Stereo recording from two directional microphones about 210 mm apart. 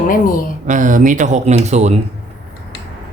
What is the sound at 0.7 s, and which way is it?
Speech, 35° right (ahead or behind).